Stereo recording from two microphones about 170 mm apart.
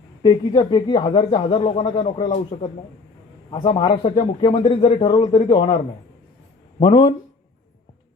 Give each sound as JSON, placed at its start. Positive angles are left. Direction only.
{"t": 0.2, "sound": "speech", "side_deg": 25}